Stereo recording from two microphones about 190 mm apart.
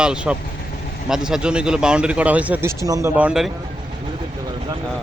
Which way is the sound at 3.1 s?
5° right (ahead or behind).